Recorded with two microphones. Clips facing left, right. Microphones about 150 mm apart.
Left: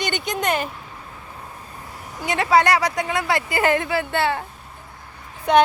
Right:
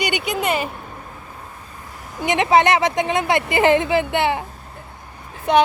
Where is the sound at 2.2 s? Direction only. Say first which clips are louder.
Right 2 dB; 20° right (ahead or behind).